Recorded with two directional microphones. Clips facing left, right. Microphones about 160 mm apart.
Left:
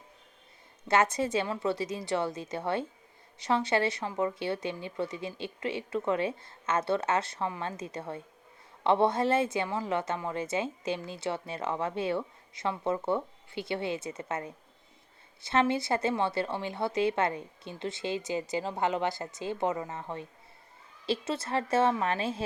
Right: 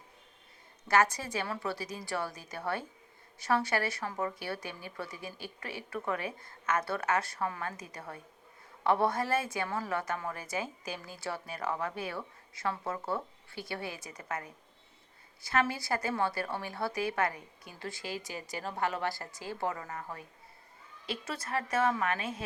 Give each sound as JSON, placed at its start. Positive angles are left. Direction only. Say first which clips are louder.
{"t": 0.9, "sound": "a woman's voice", "louder": "left 2 dB", "side_deg": 25}